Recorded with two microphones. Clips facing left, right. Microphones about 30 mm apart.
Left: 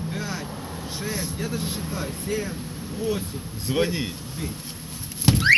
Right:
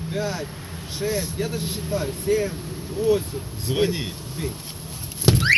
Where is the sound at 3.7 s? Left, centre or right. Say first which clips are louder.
Even; centre.